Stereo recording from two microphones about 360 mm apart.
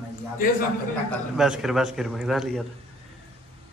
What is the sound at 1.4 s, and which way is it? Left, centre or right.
A man's voice, centre.